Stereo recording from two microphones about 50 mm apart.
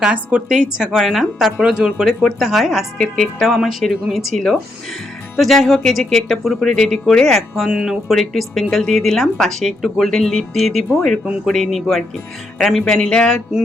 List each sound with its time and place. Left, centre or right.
0.1 s a woman's voice: right
0.4 s a woman's voice: centre
3.4 s speech: centre
12.8 s speech: centre